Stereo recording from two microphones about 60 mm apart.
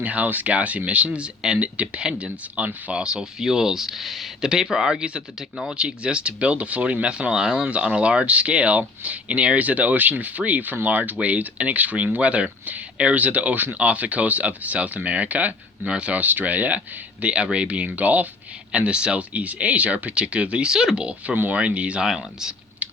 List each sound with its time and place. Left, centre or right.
0.0 s speech: right
22.0 s speech: centre